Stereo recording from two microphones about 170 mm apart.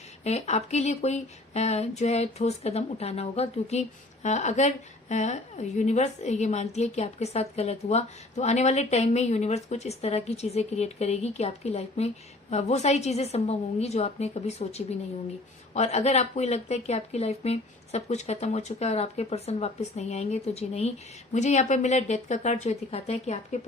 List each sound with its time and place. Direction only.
0.3 s a woman's voice: 40° left (ahead or behind)